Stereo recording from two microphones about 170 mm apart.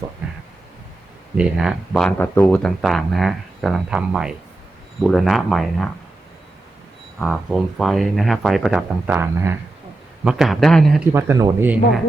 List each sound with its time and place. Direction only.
0.2 s a sound: 5° right (ahead or behind)
1.4 s speech: 5° right (ahead or behind)
7.2 s speech: centre (ahead or behind)
9.1 s speech: 15° right (ahead or behind)
10.2 s speech: centre (ahead or behind)
11.1 s speech: 15° right (ahead or behind)